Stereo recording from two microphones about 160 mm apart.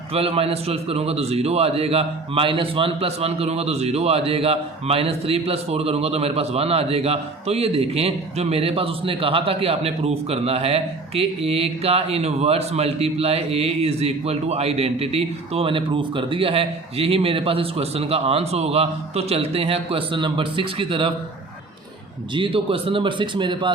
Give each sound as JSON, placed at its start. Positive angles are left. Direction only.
{"t": 0.1, "sound": "a man's voice", "side_deg": -35}
{"t": 22.4, "sound": "a man's voice", "side_deg": -35}